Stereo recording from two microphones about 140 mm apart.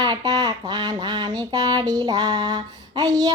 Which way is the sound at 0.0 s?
30° right (ahead or behind).